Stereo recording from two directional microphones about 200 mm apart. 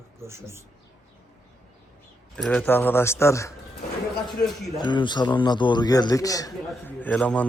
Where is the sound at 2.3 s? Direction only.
5° left (ahead or behind).